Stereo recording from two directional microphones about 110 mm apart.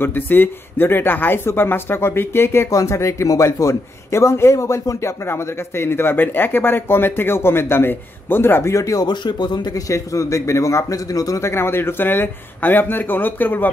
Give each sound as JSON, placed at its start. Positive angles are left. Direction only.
{"t": 0.0, "sound": "speech", "side_deg": 20}